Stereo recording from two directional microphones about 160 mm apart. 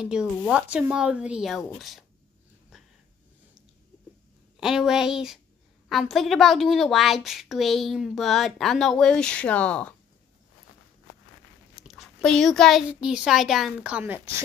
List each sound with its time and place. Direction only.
0.0 s a woman's voice: 5° right (ahead or behind)
4.6 s a woman's voice: 5° right (ahead or behind)
11.7 s a child's voice: centre (ahead or behind)